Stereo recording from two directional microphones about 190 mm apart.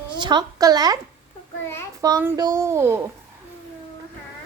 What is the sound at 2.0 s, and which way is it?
A woman's voice, 20° right (ahead or behind).